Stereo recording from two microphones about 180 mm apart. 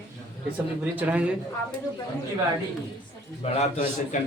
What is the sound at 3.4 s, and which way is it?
Speech, 45° left (ahead or behind).